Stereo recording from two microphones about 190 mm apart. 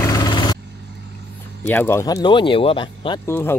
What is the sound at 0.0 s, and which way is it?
Vehicle, 20° left (ahead or behind).